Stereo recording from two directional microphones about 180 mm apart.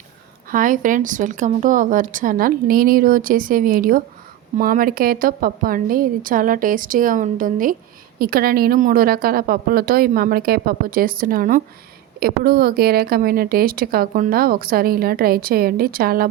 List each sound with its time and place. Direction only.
0.5 s a woman's voice: 45° right (ahead or behind)